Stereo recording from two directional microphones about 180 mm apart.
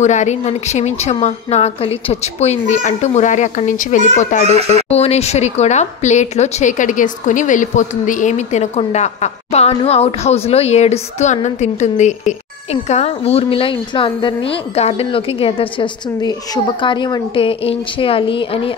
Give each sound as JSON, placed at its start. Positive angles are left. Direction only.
{"t": 0.0, "sound": "a child's voice", "side_deg": 40}